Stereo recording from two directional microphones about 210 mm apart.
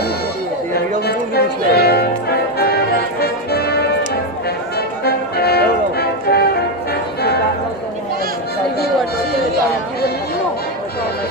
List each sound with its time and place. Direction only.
1.0 s music: 50° left (ahead or behind)